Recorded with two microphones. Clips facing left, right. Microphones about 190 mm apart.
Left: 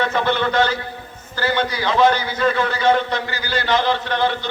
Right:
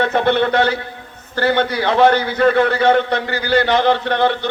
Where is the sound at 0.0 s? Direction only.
60° right (ahead or behind).